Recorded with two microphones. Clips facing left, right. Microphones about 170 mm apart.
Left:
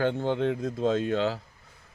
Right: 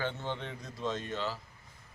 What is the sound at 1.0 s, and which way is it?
Speech, 70° left (ahead or behind).